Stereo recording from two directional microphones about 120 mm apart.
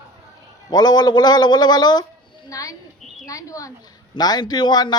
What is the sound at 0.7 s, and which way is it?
A woman's voice, 35° left (ahead or behind).